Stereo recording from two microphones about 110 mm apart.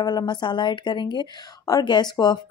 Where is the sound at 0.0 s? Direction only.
40° left (ahead or behind).